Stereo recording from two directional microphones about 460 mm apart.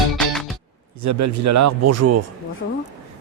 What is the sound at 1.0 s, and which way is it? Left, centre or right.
Speech, right.